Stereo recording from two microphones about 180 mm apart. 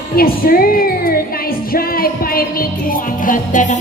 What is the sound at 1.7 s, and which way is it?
Music, 55° left (ahead or behind).